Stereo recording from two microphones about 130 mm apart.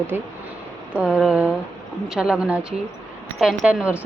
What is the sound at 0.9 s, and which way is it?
A woman's voice, 5° right (ahead or behind).